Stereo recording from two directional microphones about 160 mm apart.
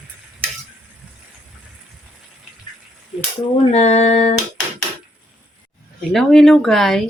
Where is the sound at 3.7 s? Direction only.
45° left (ahead or behind).